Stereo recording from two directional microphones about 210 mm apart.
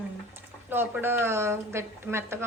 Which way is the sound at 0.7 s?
10° right (ahead or behind).